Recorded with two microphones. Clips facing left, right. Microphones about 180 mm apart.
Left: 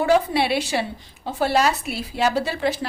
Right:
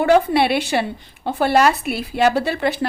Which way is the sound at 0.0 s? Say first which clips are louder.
Right 4 dB; 60° right (ahead or behind).